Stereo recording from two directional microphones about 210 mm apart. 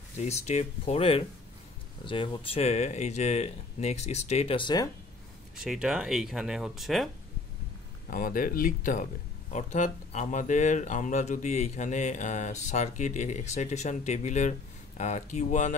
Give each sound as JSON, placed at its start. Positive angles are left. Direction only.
{"t": 0.2, "sound": "speech", "side_deg": 30}
{"t": 5.6, "sound": "speech", "side_deg": -5}
{"t": 8.1, "sound": "speech", "side_deg": 40}